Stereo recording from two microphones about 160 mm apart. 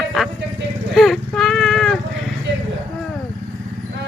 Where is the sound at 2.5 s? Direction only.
90° right.